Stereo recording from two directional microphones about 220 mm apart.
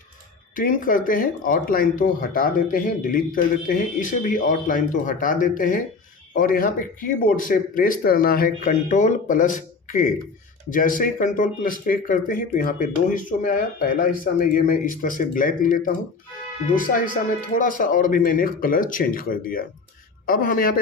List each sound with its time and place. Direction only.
0.5 s speech: 40° left (ahead or behind)